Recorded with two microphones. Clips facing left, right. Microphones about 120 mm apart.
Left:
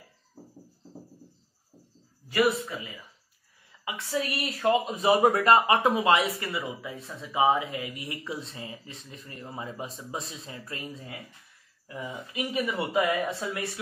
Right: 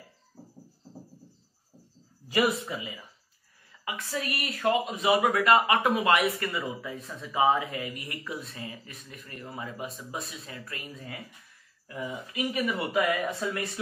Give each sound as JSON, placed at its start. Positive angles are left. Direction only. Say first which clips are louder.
{"t": 3.8, "sound": "speech", "louder": "left 3 dB", "side_deg": 15}
{"t": 5.0, "sound": "speech", "louder": "left 2 dB", "side_deg": 35}